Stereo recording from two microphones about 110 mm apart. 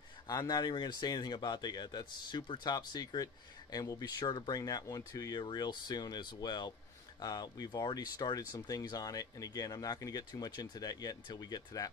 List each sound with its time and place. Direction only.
0.3 s speech: 35° left (ahead or behind)